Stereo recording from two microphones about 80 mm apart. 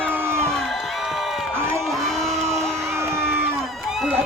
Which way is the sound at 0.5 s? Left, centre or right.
Centre.